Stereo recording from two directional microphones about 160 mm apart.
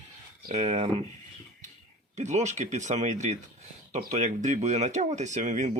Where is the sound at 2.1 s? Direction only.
45° right (ahead or behind).